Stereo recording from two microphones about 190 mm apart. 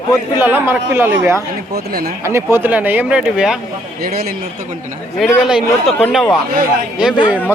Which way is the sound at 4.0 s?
55° right (ahead or behind).